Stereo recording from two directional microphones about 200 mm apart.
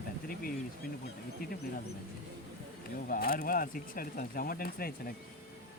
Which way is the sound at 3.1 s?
45° left (ahead or behind).